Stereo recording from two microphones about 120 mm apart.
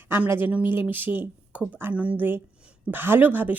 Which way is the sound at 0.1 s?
15° right (ahead or behind).